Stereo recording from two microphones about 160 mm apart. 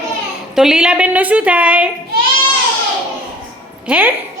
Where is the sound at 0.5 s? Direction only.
5° right (ahead or behind).